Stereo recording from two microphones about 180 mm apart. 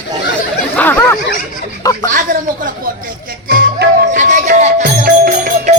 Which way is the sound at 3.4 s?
60° right (ahead or behind).